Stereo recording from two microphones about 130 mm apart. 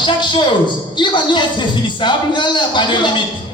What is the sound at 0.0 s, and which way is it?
A woman's voice, 35° left (ahead or behind).